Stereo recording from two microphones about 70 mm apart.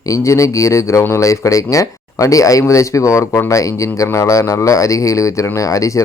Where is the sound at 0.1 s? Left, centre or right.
Left.